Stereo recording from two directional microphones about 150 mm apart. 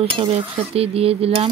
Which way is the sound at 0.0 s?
35° right (ahead or behind).